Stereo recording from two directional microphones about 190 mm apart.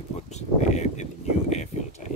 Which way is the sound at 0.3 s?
40° left (ahead or behind).